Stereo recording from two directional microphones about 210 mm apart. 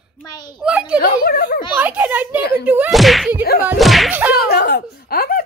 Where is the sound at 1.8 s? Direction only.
5° right (ahead or behind).